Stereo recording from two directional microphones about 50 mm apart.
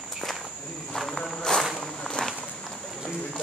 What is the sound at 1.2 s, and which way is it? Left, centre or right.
Insect, centre.